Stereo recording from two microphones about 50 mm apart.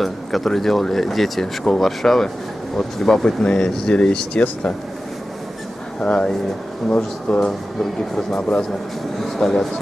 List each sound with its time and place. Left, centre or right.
0.0 s speech: centre; by 4.7 s left
5.9 s speech: left
7.8 s speech: centre
9.4 s speech: centre